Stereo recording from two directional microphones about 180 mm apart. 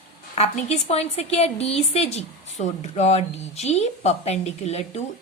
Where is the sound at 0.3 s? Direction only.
35° left (ahead or behind).